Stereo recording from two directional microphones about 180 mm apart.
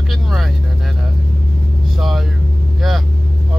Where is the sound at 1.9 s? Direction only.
Centre (ahead or behind).